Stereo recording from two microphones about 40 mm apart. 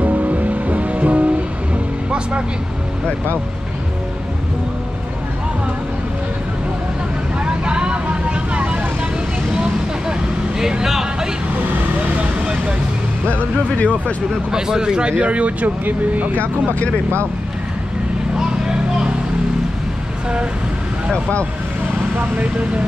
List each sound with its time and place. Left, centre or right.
0.0 s music: right
7.3 s vehicle: right
10.6 s a sound: centre
13.3 s speech: left
14.5 s speech: centre; by 15.7 s right
21.1 s speech: left
22.4 s speech: right